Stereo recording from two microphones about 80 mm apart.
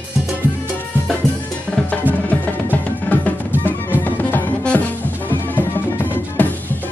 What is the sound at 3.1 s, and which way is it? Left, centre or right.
Music, left.